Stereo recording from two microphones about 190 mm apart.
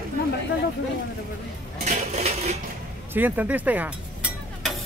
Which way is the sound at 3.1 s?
10° right (ahead or behind).